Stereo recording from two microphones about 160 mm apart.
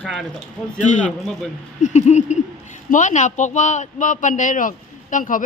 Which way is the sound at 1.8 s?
45° left (ahead or behind).